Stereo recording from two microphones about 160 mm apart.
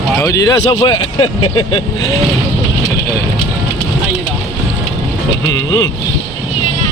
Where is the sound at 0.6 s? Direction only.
30° left (ahead or behind).